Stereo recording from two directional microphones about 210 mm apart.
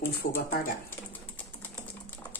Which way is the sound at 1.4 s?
10° left (ahead or behind).